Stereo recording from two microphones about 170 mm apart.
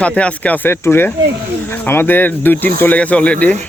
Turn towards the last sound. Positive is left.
turn(degrees=10)  # may be behind; listen again after turning